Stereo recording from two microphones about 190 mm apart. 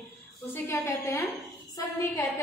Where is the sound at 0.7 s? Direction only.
15° left (ahead or behind).